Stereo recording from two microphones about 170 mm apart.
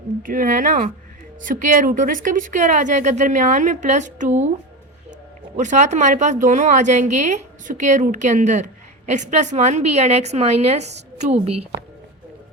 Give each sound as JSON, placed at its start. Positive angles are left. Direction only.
{"t": 0.2, "sound": "a woman's voice", "side_deg": -55}
{"t": 5.5, "sound": "a woman's voice", "side_deg": -45}